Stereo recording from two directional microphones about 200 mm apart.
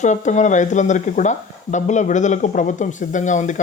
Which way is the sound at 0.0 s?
35° left (ahead or behind).